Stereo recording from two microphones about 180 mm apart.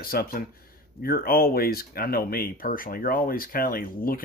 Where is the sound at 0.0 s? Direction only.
55° left (ahead or behind).